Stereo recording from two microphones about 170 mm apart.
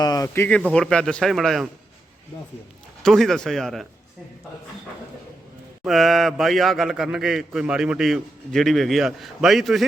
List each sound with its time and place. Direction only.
0.0 s a man's voice: 20° left (ahead or behind); by 1.7 s centre (ahead or behind)
3.0 s a man's voice: centre (ahead or behind)
5.8 s a man's voice: centre (ahead or behind)